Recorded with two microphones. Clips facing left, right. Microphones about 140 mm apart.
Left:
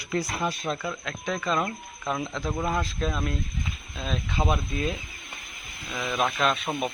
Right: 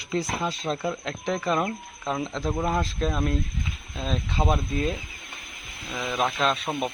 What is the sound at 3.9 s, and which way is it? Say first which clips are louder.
Speech: right 2 dB; 35° right (ahead or behind).